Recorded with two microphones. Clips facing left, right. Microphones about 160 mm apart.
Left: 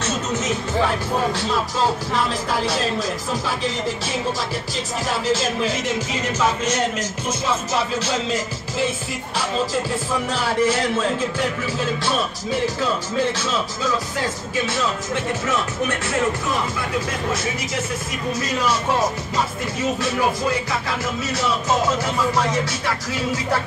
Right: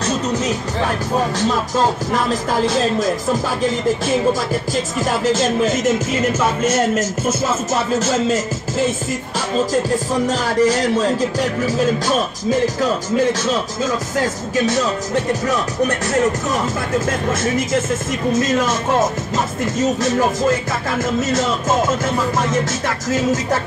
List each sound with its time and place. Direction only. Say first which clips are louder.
2.6 s music: right 5 dB; 45° right (ahead or behind)
5.3 s music: right 3 dB; 45° right (ahead or behind)
10.4 s speech: right 2 dB; 40° right (ahead or behind)
12.4 s music: right 6 dB; 45° right (ahead or behind)
14.7 s speech: right 5 dB; 40° right (ahead or behind)
18.3 s music: right 5 dB; 50° right (ahead or behind)